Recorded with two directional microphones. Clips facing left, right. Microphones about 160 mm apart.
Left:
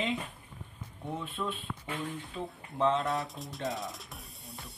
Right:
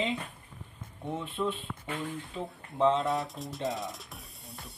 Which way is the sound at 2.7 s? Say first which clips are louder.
Right 3 dB; 20° right (ahead or behind).